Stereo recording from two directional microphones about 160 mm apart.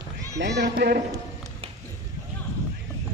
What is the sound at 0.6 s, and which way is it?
Speech, 80° right.